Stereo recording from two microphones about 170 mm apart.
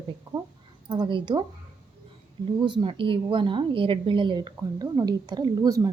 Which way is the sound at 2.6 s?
25° right (ahead or behind).